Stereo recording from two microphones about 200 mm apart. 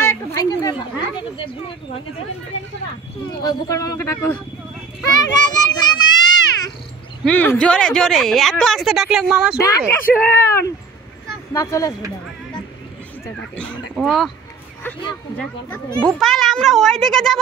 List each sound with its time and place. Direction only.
0.0 s a sound: 15° left (ahead or behind)
3.4 s speech: 20° left (ahead or behind)
5.0 s children playing: 20° left (ahead or behind)
7.2 s speech: 5° left (ahead or behind)
9.6 s speech: 15° left (ahead or behind)
11.6 s speech: 15° left (ahead or behind)
13.9 s speech: centre (ahead or behind)
15.3 s speech: 5° left (ahead or behind)